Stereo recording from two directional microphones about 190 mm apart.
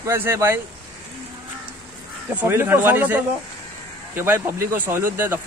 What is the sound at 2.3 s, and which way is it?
Speech, 10° right (ahead or behind).